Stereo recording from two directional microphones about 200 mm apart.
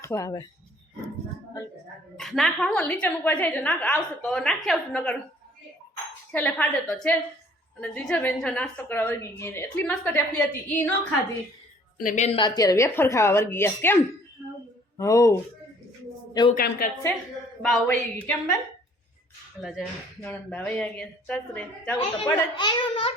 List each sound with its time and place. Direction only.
0.0 s speech: 15° left (ahead or behind)
2.1 s a woman's voice: centre (ahead or behind)
6.3 s a woman's voice: 10° left (ahead or behind)
11.9 s a woman's voice: 40° left (ahead or behind)
12.4 s a woman's voice: 20° left (ahead or behind)
16.6 s a woman's voice: 45° left (ahead or behind)
17.6 s a woman's voice: 5° left (ahead or behind)
20.2 s a woman's voice: 10° left (ahead or behind)
22.5 s a child's voice: 25° left (ahead or behind)